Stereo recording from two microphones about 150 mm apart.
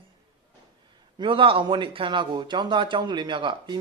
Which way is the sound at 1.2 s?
35° right (ahead or behind).